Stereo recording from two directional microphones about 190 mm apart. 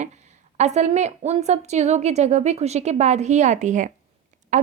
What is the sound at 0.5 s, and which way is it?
A woman's voice, 35° right (ahead or behind).